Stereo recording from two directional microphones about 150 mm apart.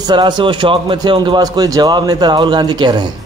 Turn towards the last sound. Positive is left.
turn(degrees=-30)  # may be behind; listen again after turning